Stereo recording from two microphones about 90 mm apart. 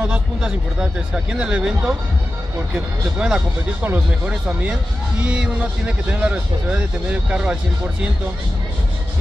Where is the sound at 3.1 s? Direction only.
10° right (ahead or behind).